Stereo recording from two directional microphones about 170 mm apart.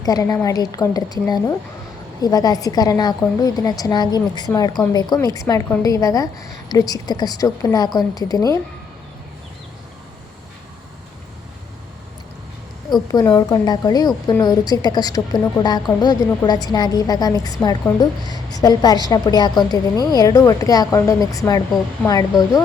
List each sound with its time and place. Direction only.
0.0 s a woman's voice: 20° left (ahead or behind)
2.2 s a woman's voice: 20° left (ahead or behind)
12.9 s a woman's voice: 25° left (ahead or behind)